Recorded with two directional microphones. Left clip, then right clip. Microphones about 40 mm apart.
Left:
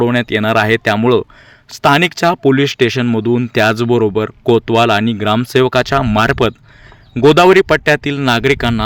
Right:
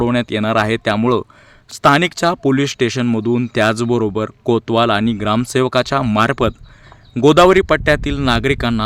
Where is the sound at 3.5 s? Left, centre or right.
Left; by 8.3 s centre.